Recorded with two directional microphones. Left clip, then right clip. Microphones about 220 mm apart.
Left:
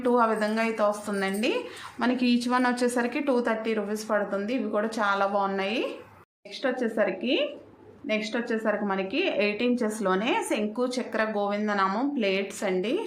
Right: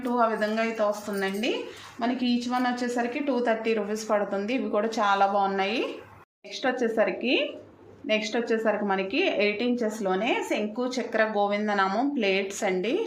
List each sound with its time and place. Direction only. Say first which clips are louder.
0.0 s a woman's voice: left 1 dB; 15° left (ahead or behind)
2.5 s a woman's voice: left 2 dB; 25° left (ahead or behind)
2.8 s a woman's voice: left 2 dB; 15° left (ahead or behind)
10.9 s a woman's voice: right 3 dB; centre (ahead or behind)